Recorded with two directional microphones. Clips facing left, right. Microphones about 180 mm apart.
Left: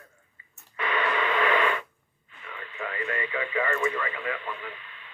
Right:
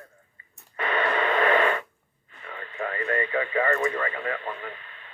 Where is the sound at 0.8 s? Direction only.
50° right (ahead or behind).